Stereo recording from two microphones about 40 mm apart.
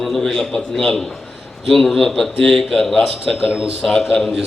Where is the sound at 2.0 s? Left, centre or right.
Centre.